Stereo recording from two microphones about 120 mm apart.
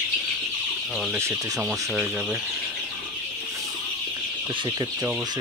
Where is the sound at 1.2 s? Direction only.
25° right (ahead or behind).